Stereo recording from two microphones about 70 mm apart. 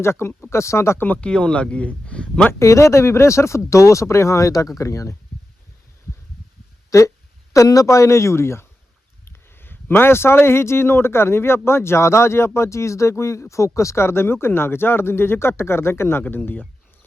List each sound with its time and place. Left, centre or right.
0.0 s a man's voice: left
1.0 s speech: left
1.3 s speech: centre
2.5 s speech: left
6.9 s a man's voice: left